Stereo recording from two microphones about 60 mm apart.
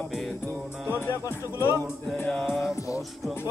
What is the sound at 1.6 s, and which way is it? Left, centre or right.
Speech, left.